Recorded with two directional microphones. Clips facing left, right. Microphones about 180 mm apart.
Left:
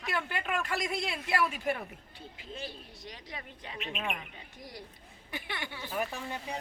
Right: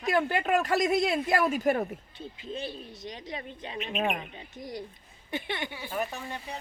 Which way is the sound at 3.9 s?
40° right (ahead or behind).